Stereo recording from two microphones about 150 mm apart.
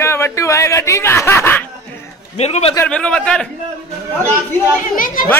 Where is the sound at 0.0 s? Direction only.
15° left (ahead or behind).